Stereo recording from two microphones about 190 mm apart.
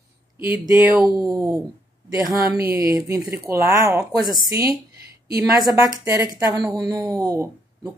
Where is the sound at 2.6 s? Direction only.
15° right (ahead or behind).